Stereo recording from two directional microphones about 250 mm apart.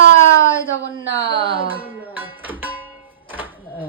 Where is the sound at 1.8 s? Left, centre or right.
Centre.